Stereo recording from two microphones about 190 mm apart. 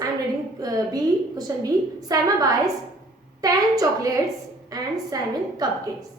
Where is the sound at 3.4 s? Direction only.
20° right (ahead or behind).